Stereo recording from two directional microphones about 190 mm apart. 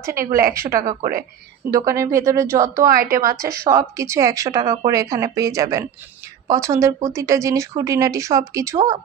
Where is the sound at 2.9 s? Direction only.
50° right (ahead or behind).